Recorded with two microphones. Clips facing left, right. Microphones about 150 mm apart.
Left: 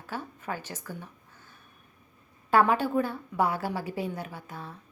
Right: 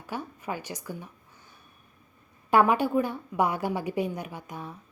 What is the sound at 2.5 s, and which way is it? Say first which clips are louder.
A woman's voice: right 1 dB; 15° right (ahead or behind).